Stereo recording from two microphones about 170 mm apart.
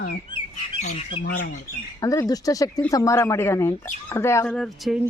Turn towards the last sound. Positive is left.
turn(degrees=0)  # may be behind; listen again after turning